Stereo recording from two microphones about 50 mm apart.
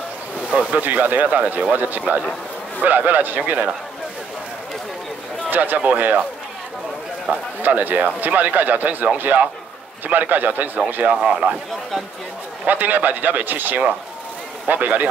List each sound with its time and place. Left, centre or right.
0.5 s speech: right
5.5 s speech: right
7.3 s speech: right
11.1 s speech: centre
12.6 s speech: right